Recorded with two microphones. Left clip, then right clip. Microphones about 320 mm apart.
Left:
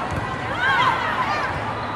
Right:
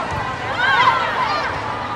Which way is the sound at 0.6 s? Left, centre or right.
Right.